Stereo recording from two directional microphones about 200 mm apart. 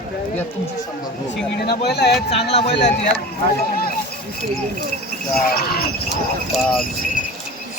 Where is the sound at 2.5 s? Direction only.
30° left (ahead or behind).